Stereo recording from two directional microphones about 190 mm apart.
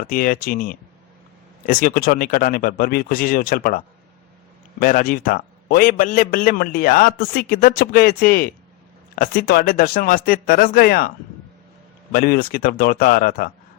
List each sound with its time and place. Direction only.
0.1 s a man's voice: 50° left (ahead or behind)
12.1 s a man's voice: 50° left (ahead or behind)